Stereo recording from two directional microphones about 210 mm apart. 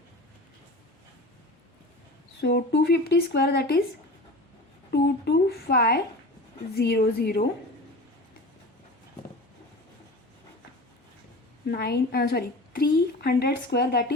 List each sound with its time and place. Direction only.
2.4 s speech: 50° left (ahead or behind)
4.9 s speech: 50° left (ahead or behind)
11.7 s a woman's voice: 50° left (ahead or behind)